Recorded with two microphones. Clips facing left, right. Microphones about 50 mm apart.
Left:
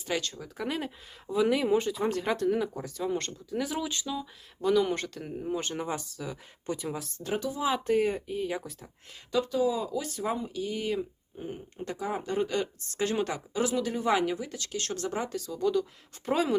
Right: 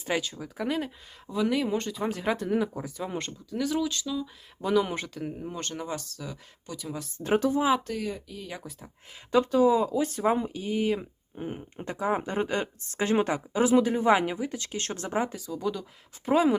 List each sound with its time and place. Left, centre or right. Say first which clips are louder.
0.2 s speech: right 2 dB; centre
3.5 s speech: right 4 dB; centre
4.6 s speech: even; centre
5.5 s speech: left 2 dB; centre
6.7 s speech: left 4 dB; left
7.3 s speech: right 8 dB; right
7.9 s speech: left 7 dB; left
8.7 s speech: even; centre
9.3 s speech: right 6 dB; right; by 11.0 s centre
11.3 s speech: right 2 dB; right
15.4 s speech: left 4 dB; centre